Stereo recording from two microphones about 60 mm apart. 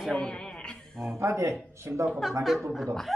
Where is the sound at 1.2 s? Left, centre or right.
Right.